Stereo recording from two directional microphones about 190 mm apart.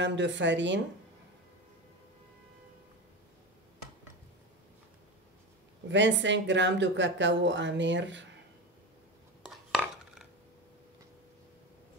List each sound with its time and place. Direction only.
0.0 s speech: 70° right (ahead or behind)
5.9 s speech: 70° right (ahead or behind)
9.5 s cutlery: centre (ahead or behind)